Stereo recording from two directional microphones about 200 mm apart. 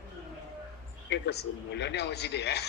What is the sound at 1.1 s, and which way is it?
Speech, 55° left (ahead or behind).